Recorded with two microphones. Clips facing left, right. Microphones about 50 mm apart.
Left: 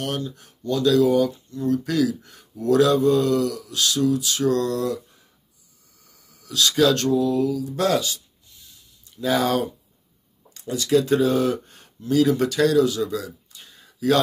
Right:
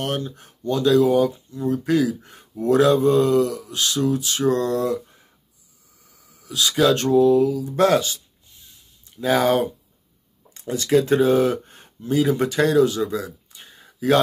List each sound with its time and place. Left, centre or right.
0.0 s speech: right
6.4 s speech: centre
7.1 s speech: right
9.2 s speech: right
10.6 s speech: right